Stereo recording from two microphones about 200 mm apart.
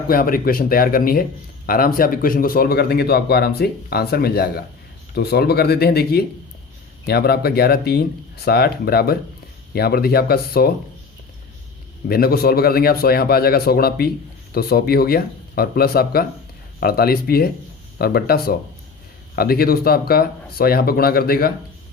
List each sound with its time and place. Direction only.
0.1 s speech: 45° left (ahead or behind)
12.0 s speech: 50° left (ahead or behind)